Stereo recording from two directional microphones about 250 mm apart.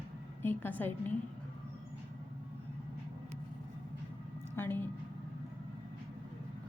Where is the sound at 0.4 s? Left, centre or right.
Centre.